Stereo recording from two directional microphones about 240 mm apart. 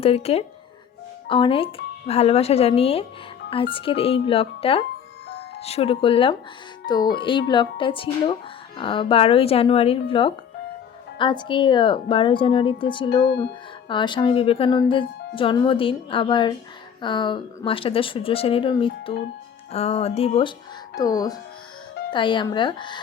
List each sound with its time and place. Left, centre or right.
0.0 s speech: left
13.2 s speech: left
13.8 s speech: centre